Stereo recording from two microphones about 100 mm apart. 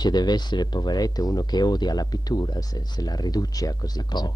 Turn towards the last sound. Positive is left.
turn(degrees=45)  # may be behind; listen again after turning